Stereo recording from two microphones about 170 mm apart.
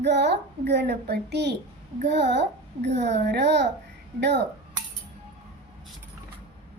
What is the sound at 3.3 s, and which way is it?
Speech, 85° right.